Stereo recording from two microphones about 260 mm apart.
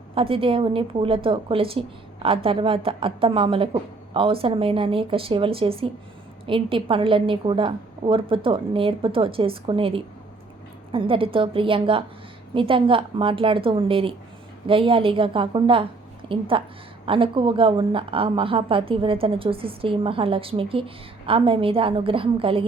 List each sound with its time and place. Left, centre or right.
0.1 s a woman's voice: right